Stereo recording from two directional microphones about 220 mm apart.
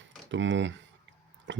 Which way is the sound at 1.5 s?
55° right (ahead or behind).